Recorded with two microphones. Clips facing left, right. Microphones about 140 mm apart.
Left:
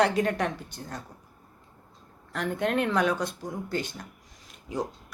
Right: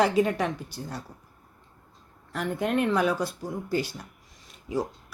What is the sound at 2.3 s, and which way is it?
Speech, 5° right (ahead or behind).